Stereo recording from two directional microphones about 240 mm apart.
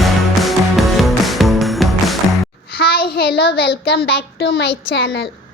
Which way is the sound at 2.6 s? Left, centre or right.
Left.